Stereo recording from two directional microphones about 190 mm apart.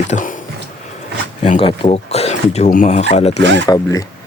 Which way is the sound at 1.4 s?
30° left (ahead or behind).